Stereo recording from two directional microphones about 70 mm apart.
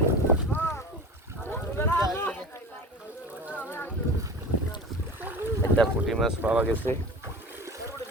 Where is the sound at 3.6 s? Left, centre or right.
Left.